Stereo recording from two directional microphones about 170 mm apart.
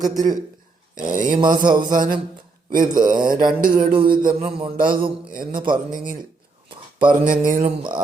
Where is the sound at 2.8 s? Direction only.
25° right (ahead or behind).